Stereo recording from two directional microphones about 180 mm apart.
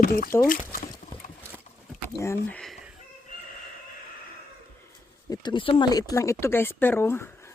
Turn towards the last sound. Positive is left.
turn(degrees=15)  # may be behind; listen again after turning